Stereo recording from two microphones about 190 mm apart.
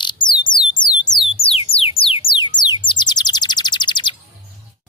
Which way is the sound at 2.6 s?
25° left (ahead or behind).